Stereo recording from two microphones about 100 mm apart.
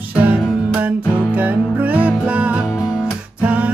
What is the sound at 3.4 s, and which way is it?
Music, 15° right (ahead or behind).